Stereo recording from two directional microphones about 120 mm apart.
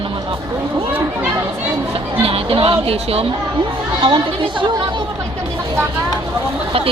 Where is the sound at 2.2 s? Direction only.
50° right (ahead or behind).